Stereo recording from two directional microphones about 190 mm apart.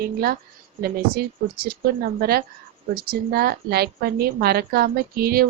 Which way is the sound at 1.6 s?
55° right (ahead or behind).